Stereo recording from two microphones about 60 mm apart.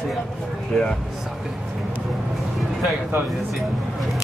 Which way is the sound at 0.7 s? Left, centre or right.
Centre.